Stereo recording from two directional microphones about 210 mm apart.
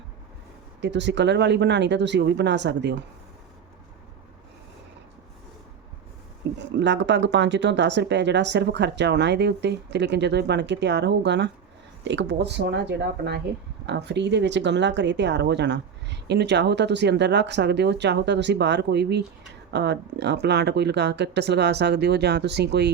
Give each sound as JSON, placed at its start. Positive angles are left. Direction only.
{"t": 0.8, "sound": "speech", "side_deg": -55}
{"t": 6.7, "sound": "speech", "side_deg": -55}